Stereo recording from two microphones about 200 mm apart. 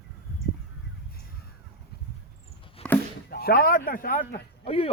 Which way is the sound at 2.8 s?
30° left (ahead or behind).